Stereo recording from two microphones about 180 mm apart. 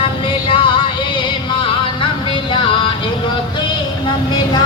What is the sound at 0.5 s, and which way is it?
Music, 30° left (ahead or behind).